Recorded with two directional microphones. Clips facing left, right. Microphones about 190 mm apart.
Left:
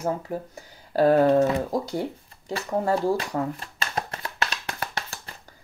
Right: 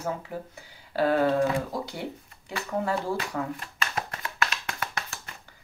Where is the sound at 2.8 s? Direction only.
35° left (ahead or behind).